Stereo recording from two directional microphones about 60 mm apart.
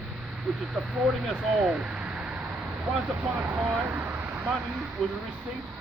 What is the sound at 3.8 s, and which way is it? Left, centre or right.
Vehicle, right.